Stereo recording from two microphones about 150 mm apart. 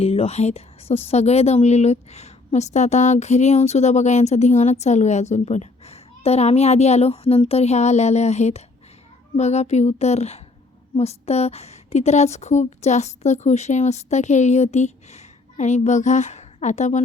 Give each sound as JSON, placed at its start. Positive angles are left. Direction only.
{"t": 0.0, "sound": "a woman's voice", "side_deg": 40}